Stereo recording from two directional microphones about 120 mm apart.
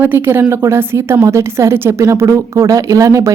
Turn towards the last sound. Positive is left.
turn(degrees=-25)  # may be behind; listen again after turning